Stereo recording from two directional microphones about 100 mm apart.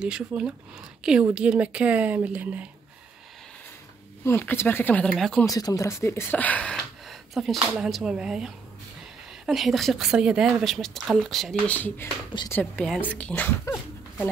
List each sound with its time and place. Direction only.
0.0 s speech: 10° right (ahead or behind)
4.2 s speech: 25° left (ahead or behind)
5.4 s speech: 35° left (ahead or behind); by 6.8 s 15° left (ahead or behind)
7.1 s speech: centre (ahead or behind)
9.5 s a woman's voice: centre (ahead or behind)
11.6 s speech: 15° left (ahead or behind)
13.3 s speech: 25° left (ahead or behind)